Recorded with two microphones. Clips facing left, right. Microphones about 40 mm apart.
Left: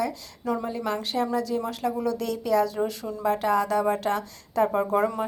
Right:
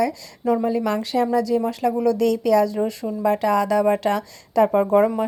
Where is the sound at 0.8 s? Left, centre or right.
Right.